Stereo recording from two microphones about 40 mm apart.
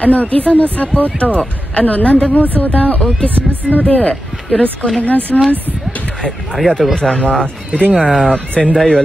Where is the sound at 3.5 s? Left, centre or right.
Right.